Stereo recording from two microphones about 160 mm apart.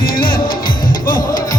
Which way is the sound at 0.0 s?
65° left (ahead or behind).